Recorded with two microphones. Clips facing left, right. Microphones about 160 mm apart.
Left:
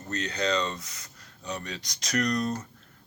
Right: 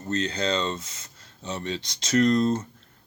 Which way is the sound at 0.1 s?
30° right (ahead or behind).